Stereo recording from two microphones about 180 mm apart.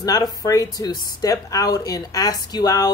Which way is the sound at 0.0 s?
20° left (ahead or behind).